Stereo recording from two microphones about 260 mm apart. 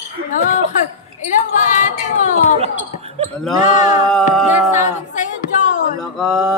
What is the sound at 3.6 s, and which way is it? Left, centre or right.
Speech, left.